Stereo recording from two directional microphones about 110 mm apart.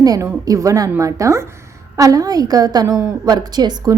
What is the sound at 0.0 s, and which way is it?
A woman's voice, 35° right (ahead or behind).